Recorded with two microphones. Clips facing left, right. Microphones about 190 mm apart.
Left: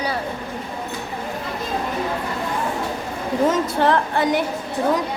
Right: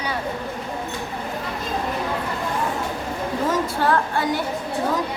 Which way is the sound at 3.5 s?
20° left (ahead or behind).